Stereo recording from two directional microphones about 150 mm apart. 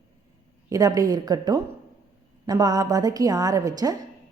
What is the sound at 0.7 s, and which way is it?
A woman's voice, 25° right (ahead or behind).